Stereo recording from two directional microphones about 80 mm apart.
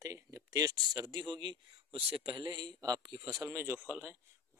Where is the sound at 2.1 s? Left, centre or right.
Right.